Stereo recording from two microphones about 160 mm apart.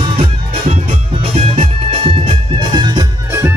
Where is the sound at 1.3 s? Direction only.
35° right (ahead or behind).